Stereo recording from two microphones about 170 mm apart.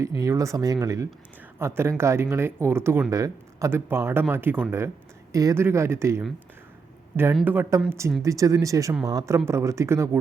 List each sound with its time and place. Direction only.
0.2 s speech: 20° right (ahead or behind)
7.4 s speech: 10° right (ahead or behind)